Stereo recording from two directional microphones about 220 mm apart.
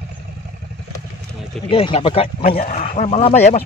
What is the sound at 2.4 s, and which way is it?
Speech, 40° left (ahead or behind).